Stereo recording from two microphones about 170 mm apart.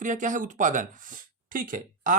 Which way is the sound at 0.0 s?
50° right (ahead or behind).